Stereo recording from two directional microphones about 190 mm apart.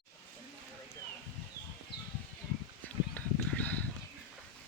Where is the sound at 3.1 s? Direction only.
10° left (ahead or behind).